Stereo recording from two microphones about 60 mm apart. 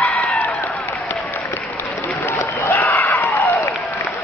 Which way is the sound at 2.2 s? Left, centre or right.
Left.